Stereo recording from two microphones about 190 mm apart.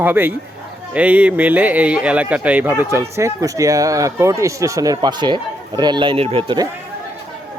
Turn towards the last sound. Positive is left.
turn(degrees=-25)  # may be behind; listen again after turning